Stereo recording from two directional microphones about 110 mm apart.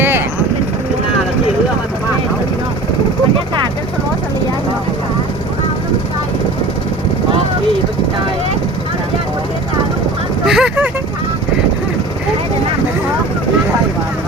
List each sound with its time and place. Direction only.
10.4 s vehicle: 5° right (ahead or behind)